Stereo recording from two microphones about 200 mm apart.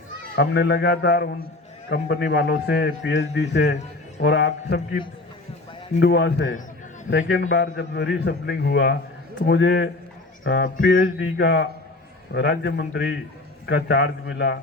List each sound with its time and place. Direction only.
0.3 s a man's voice: 55° left (ahead or behind)
6.0 s a man's voice: 55° left (ahead or behind)